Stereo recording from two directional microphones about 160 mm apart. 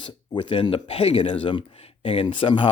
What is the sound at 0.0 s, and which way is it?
Speech, 30° left (ahead or behind).